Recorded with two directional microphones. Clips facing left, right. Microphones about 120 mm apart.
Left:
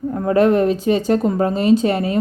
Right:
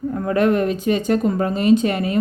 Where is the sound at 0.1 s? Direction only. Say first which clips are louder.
Left 3 dB; 30° left (ahead or behind).